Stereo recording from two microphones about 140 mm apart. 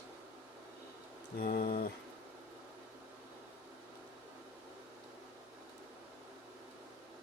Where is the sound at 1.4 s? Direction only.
90° left.